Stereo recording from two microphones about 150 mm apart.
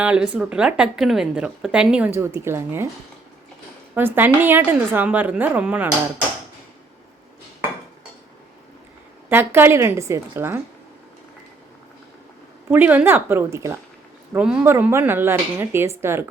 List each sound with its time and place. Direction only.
0.0 s speech: 5° right (ahead or behind)
3.9 s speech: 15° right (ahead or behind)
9.3 s speech: 15° right (ahead or behind)
12.7 s speech: 10° right (ahead or behind)
14.3 s speech: 5° right (ahead or behind)